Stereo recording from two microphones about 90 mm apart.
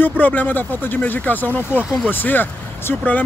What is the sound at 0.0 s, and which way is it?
Speech, 20° left (ahead or behind).